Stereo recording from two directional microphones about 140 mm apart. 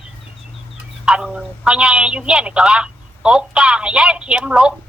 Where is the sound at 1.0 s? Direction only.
5° right (ahead or behind).